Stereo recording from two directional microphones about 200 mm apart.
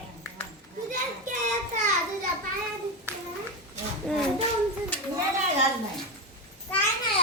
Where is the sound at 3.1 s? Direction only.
10° right (ahead or behind).